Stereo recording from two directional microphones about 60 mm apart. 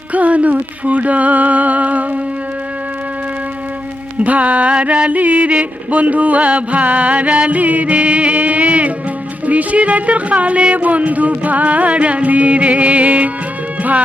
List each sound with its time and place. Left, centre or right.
0.1 s music: right
4.2 s music: right